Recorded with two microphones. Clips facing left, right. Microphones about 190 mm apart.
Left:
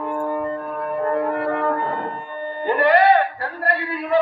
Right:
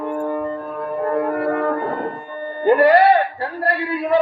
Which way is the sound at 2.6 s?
40° right (ahead or behind).